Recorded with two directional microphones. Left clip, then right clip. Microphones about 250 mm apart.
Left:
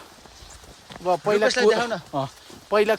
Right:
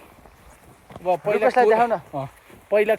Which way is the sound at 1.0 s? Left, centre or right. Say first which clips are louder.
Even; centre.